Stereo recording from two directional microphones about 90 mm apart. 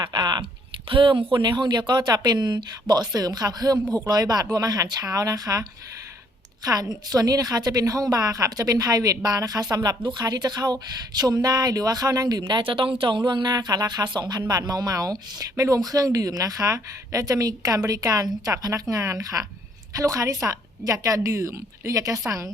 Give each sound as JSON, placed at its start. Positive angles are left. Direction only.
{"t": 0.0, "sound": "typing", "side_deg": -55}
{"t": 0.9, "sound": "speech", "side_deg": -70}
{"t": 6.7, "sound": "speech", "side_deg": -45}
{"t": 13.0, "sound": "a woman's voice", "side_deg": -60}